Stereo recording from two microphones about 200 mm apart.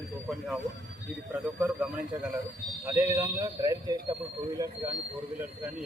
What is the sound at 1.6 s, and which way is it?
Speech, 5° right (ahead or behind).